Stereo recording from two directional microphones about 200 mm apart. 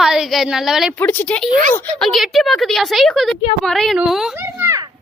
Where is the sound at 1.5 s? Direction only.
40° right (ahead or behind).